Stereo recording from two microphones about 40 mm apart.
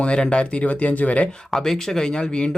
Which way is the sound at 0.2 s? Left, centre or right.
Left.